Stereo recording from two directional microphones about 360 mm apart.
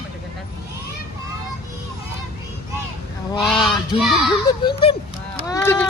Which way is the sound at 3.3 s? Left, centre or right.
Centre.